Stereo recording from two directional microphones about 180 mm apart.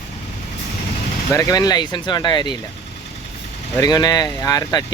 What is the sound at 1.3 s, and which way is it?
Speech, 20° left (ahead or behind).